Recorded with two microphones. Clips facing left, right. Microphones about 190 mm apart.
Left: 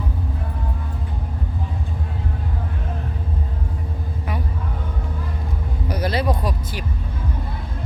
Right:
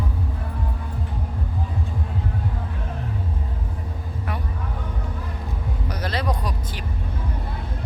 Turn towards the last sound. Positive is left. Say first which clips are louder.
# left 4 dB
turn(degrees=10)  # may be behind; listen again after turning